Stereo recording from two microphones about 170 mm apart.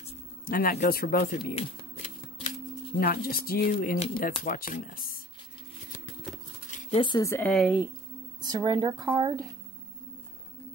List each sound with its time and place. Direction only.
0.5 s speech: 55° left (ahead or behind)
1.5 s shuffling cards: 35° left (ahead or behind)
3.0 s speech: 60° left (ahead or behind)
6.7 s a sound: 50° left (ahead or behind)
7.0 s speech: 25° left (ahead or behind)
7.2 s speech: 15° left (ahead or behind)
7.5 s speech: 5° right (ahead or behind)
8.4 s speech: 25° right (ahead or behind)